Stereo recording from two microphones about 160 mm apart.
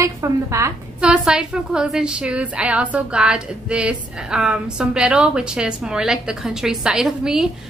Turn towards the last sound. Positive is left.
turn(degrees=-5)  # may be behind; listen again after turning